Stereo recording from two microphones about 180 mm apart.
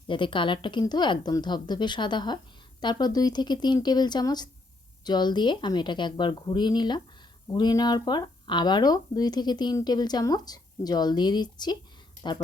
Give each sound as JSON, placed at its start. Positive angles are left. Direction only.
{"t": 0.1, "sound": "speech", "side_deg": 25}